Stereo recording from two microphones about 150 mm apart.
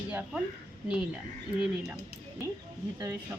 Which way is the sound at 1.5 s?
5° right (ahead or behind).